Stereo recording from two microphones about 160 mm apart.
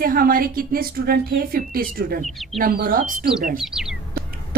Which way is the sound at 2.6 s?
65° right (ahead or behind).